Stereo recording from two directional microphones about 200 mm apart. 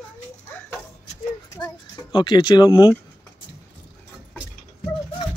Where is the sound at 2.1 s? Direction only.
25° left (ahead or behind).